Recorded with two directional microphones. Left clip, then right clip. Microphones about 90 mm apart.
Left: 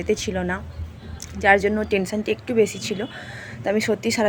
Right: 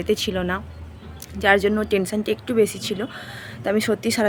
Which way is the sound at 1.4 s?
35° right (ahead or behind).